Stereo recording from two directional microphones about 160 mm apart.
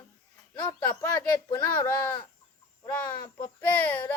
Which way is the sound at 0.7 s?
20° left (ahead or behind).